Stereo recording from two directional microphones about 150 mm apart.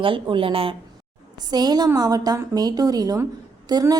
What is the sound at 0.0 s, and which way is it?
A woman's voice, 35° right (ahead or behind).